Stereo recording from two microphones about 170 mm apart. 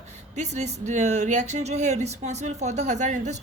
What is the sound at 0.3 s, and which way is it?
A woman's voice, 40° right (ahead or behind).